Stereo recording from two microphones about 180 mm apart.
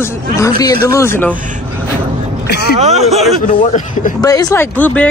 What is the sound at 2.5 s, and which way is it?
Speech, 65° left (ahead or behind).